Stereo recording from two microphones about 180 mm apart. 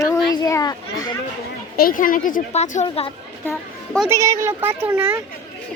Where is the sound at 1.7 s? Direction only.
55° left (ahead or behind); by 3.1 s 30° left (ahead or behind).